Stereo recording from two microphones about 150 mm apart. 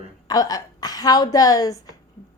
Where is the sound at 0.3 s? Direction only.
25° left (ahead or behind).